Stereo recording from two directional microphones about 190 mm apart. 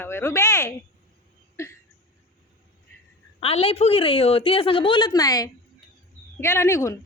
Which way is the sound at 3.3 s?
30° left (ahead or behind).